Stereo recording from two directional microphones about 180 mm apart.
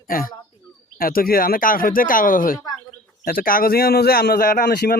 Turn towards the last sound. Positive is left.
turn(degrees=55)  # may be behind; listen again after turning